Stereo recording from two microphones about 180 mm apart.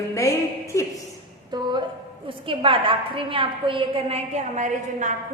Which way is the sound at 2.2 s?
30° right (ahead or behind).